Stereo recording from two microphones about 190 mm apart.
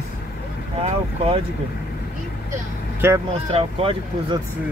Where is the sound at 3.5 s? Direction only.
30° right (ahead or behind).